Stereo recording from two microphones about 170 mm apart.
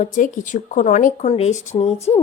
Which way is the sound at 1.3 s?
35° left (ahead or behind).